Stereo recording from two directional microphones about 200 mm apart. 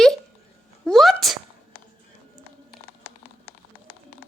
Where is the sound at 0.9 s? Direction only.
Centre (ahead or behind).